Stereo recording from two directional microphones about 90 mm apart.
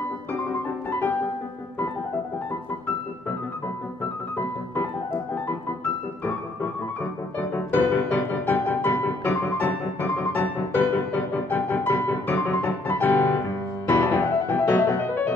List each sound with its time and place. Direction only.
0.8 s music: 20° left (ahead or behind)
7.3 s music: 25° left (ahead or behind)